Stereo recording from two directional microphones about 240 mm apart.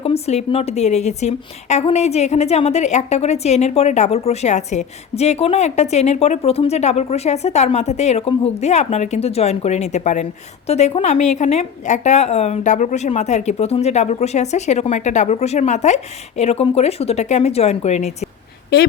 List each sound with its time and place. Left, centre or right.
0.0 s a woman's voice: left
18.7 s a woman's voice: left